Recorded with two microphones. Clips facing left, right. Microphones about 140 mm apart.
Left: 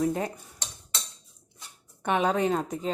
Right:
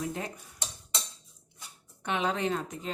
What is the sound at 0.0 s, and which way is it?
Speech, 40° left (ahead or behind).